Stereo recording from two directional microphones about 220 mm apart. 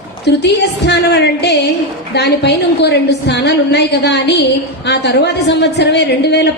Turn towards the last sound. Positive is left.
turn(degrees=50)  # may be behind; listen again after turning